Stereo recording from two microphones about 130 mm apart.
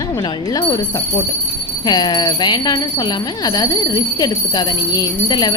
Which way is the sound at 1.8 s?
30° left (ahead or behind).